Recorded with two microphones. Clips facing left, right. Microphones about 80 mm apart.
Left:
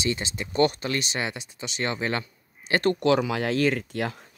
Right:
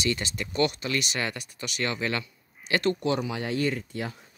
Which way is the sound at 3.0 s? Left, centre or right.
Left.